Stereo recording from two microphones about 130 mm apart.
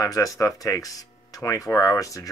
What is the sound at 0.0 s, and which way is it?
Speech, 25° left (ahead or behind).